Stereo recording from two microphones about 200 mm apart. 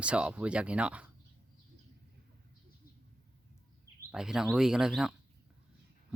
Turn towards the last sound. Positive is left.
turn(degrees=-5)  # may be behind; listen again after turning